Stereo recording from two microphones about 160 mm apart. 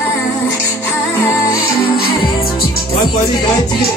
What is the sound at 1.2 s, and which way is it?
Music, 20° left (ahead or behind).